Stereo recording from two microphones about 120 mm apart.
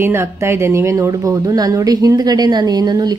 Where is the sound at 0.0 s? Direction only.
20° right (ahead or behind).